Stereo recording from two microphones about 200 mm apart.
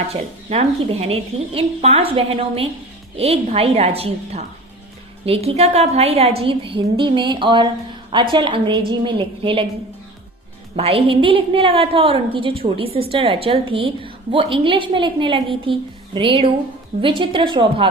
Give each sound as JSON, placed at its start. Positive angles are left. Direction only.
{"t": 0.1, "sound": "a woman's voice", "side_deg": -30}
{"t": 10.8, "sound": "a woman's voice", "side_deg": -30}